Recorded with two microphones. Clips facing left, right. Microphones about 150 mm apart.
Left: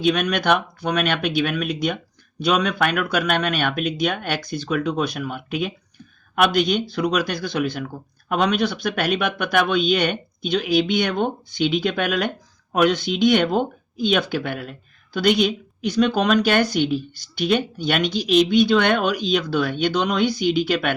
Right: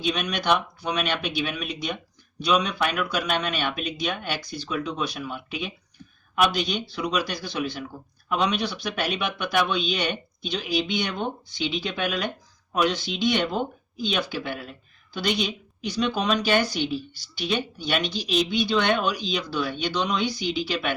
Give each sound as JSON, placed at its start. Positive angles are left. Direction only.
{"t": 0.0, "sound": "speech", "side_deg": 55}